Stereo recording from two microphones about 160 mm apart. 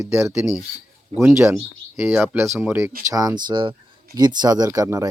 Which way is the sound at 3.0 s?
20° right (ahead or behind).